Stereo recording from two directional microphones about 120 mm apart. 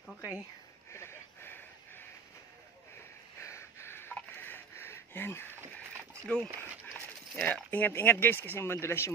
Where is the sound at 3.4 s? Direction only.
25° left (ahead or behind).